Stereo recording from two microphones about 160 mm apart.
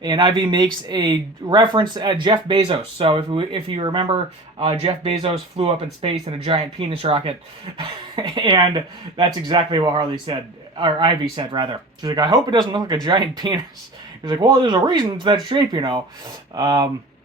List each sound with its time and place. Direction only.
0.0 s speech: 30° right (ahead or behind)